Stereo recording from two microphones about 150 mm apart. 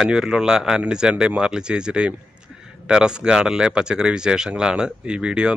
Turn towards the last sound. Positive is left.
turn(degrees=-5)  # may be behind; listen again after turning